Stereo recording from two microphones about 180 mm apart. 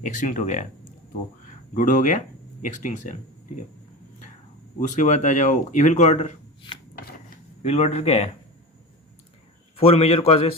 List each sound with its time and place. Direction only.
0.0 s speech: 45° left (ahead or behind)
1.7 s speech: 45° left (ahead or behind)
4.8 s speech: 40° left (ahead or behind)
7.6 s speech: 35° left (ahead or behind)
9.7 s speech: 35° left (ahead or behind)